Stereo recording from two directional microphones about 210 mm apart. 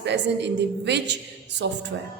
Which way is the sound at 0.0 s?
55° right (ahead or behind).